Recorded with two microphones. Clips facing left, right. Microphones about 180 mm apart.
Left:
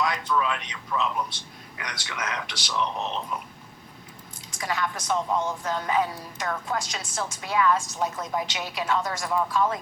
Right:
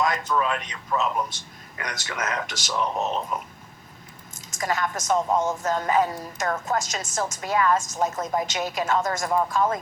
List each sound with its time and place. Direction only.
0.0 s a woman's voice: 45° right (ahead or behind)